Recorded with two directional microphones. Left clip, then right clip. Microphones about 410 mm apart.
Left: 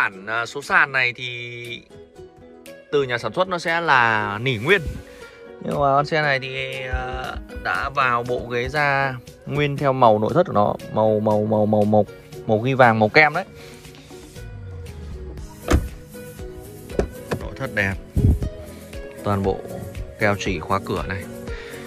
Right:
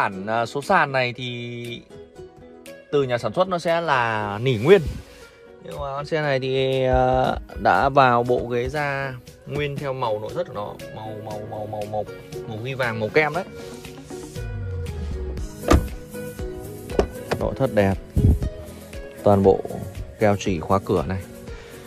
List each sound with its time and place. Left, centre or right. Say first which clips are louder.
0.0 s speech: even; centre
2.9 s speech: even; centre
10.8 s speech: left 15 dB; centre
12.4 s speech: left 11 dB; centre
17.4 s speech: right 4 dB; centre